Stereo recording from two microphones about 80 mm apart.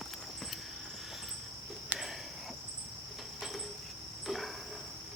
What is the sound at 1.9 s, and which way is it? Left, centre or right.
Cricket, centre.